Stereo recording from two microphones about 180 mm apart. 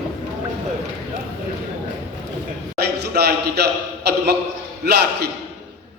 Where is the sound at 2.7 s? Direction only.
65° right (ahead or behind).